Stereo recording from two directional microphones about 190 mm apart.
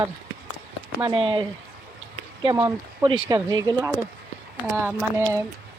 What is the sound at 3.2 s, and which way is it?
Speech, 20° right (ahead or behind).